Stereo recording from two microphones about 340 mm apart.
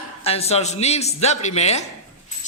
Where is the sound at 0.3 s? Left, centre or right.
Centre.